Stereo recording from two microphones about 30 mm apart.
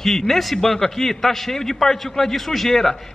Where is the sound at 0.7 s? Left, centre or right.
Centre.